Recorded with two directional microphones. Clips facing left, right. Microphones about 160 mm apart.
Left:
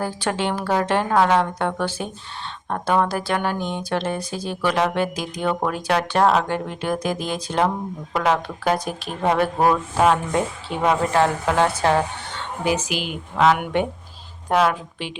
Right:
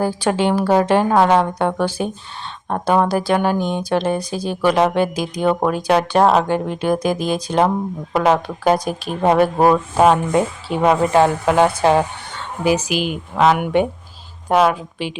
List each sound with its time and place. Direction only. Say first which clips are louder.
0.0 s speech: right 6 dB; 10° right (ahead or behind)